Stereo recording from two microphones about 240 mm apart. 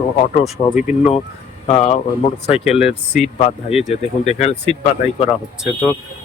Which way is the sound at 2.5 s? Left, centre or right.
Centre.